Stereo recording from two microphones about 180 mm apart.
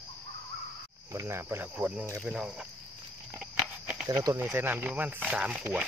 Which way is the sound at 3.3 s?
5° right (ahead or behind).